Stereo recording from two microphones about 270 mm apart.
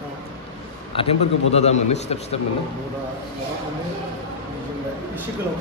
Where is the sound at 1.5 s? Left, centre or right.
Left.